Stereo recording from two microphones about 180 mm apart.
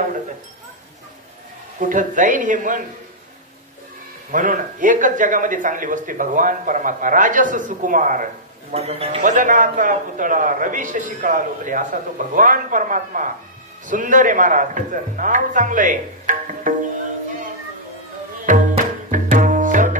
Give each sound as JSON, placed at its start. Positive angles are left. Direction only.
{"t": 1.8, "sound": "a man's voice", "side_deg": -45}
{"t": 4.3, "sound": "a man's voice", "side_deg": -45}
{"t": 8.7, "sound": "speech", "side_deg": -35}
{"t": 9.2, "sound": "a man's voice", "side_deg": -45}
{"t": 19.0, "sound": "tabla", "side_deg": -45}